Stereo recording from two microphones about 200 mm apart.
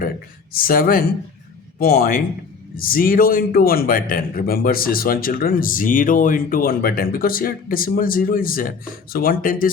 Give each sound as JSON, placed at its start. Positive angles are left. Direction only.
{"t": 0.5, "sound": "a man's voice", "side_deg": 45}